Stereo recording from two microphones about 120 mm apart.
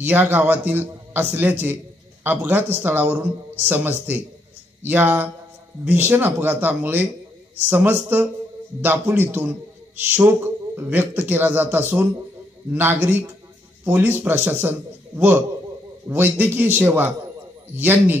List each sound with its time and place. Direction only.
0.0 s a man's voice: 15° right (ahead or behind)